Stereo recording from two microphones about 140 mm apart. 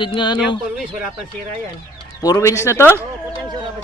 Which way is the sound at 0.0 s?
35° left (ahead or behind).